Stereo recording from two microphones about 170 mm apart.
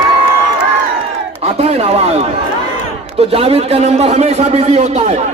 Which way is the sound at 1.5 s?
40° right (ahead or behind).